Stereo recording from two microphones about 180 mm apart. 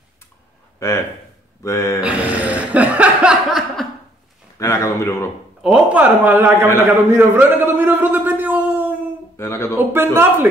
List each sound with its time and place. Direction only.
0.7 s speech: 15° left (ahead or behind)
2.0 s chuckle: 5° right (ahead or behind)
4.6 s speech: 15° left (ahead or behind)
5.6 s a man's voice: 5° right (ahead or behind)
7.1 s a sound: 10° right (ahead or behind)
9.4 s a sound: 15° left (ahead or behind)
10.1 s a man's voice: 10° right (ahead or behind)